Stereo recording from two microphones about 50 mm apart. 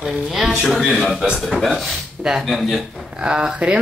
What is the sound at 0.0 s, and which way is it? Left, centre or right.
A man's voice, centre.